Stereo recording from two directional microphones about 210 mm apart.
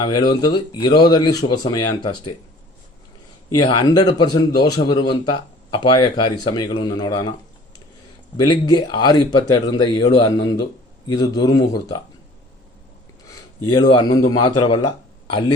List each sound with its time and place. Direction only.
0.1 s a man's voice: 20° left (ahead or behind)
3.5 s a man's voice: 20° left (ahead or behind)
8.4 s a man's voice: 20° left (ahead or behind)
13.7 s a man's voice: 20° left (ahead or behind)